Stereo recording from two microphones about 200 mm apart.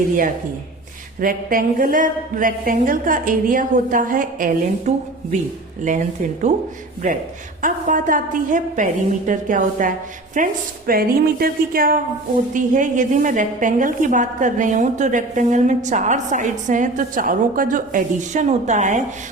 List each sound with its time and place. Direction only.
1.2 s a woman's voice: 45° right (ahead or behind)
7.6 s a woman's voice: 40° right (ahead or behind)